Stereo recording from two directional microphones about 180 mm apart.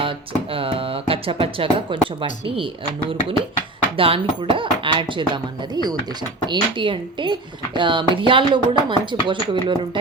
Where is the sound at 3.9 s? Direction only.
30° right (ahead or behind).